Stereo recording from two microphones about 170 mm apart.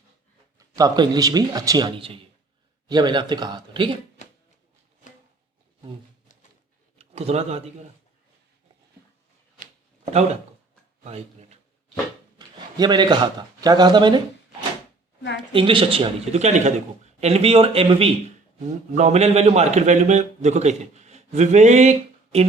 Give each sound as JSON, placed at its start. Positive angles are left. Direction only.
{"t": 0.8, "sound": "speech", "side_deg": -25}
{"t": 2.9, "sound": "speech", "side_deg": -25}
{"t": 4.2, "sound": "music", "side_deg": 45}
{"t": 7.0, "sound": "speech", "side_deg": -35}
{"t": 10.1, "sound": "speech", "side_deg": -40}
{"t": 12.4, "sound": "speech", "side_deg": -25}
{"t": 15.5, "sound": "a man's voice", "side_deg": -30}